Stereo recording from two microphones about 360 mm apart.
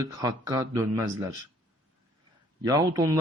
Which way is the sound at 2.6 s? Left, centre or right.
Centre.